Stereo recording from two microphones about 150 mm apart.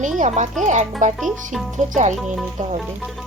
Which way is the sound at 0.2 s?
50° right (ahead or behind).